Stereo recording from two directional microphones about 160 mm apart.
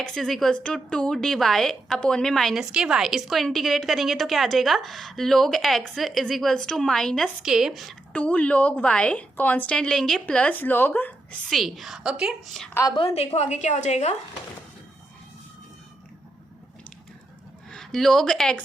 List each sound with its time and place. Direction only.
0.0 s speech: 5° left (ahead or behind)
13.0 s a woman's voice: 40° left (ahead or behind)
17.7 s speech: 5° left (ahead or behind)